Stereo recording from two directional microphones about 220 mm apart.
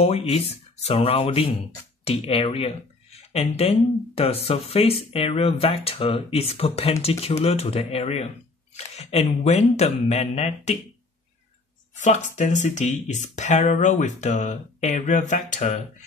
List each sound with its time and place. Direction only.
0.3 s speech: 30° left (ahead or behind)
12.0 s speech: 35° left (ahead or behind)